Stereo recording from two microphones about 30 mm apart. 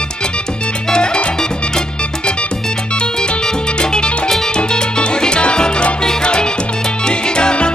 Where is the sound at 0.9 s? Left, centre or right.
Left.